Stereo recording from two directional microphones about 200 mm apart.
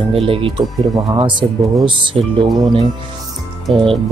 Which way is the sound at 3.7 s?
25° right (ahead or behind).